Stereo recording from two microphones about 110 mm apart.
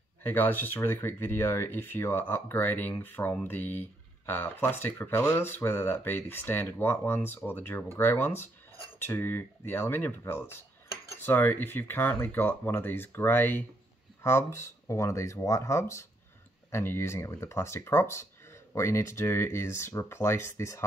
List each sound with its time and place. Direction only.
0.2 s speech: 20° left (ahead or behind)